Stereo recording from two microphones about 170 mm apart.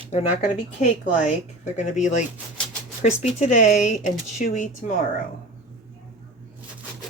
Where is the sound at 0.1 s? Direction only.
40° left (ahead or behind).